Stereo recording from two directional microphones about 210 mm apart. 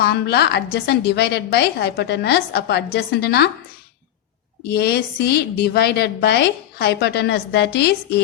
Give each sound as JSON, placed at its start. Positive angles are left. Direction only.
{"t": 0.0, "sound": "a woman's voice", "side_deg": 50}
{"t": 4.7, "sound": "a woman's voice", "side_deg": 50}